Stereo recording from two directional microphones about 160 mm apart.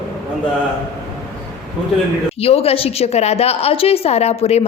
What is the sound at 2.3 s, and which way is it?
A woman's voice, 40° left (ahead or behind).